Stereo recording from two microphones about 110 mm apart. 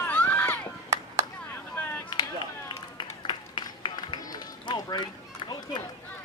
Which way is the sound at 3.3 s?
50° left (ahead or behind).